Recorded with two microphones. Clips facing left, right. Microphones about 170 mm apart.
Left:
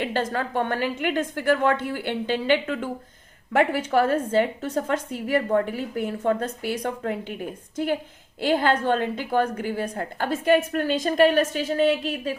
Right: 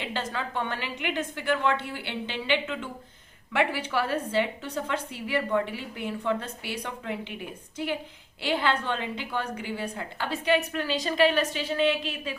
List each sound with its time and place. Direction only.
0.0 s a woman's voice: 50° left (ahead or behind)
8.4 s a woman's voice: 45° left (ahead or behind)